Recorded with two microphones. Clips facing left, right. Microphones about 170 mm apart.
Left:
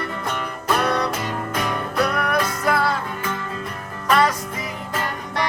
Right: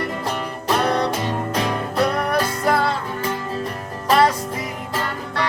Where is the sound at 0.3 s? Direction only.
30° right (ahead or behind).